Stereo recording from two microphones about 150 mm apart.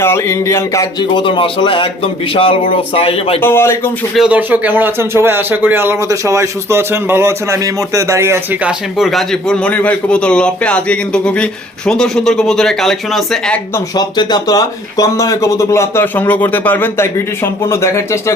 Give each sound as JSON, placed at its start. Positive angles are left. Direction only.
{"t": 0.0, "sound": "speech", "side_deg": 15}
{"t": 3.4, "sound": "a man's voice", "side_deg": 15}
{"t": 4.1, "sound": "speech", "side_deg": -5}
{"t": 9.0, "sound": "a man's voice", "side_deg": 0}
{"t": 13.7, "sound": "speech", "side_deg": 25}